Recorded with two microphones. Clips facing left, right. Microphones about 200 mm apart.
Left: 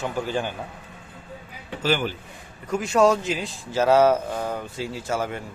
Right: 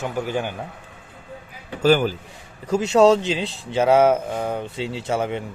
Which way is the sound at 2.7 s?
25° right (ahead or behind).